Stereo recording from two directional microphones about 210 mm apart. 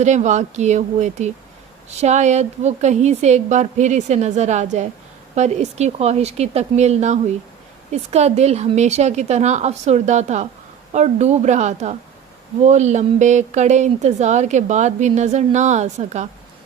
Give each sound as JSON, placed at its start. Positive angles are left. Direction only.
{"t": 0.0, "sound": "speech", "side_deg": -35}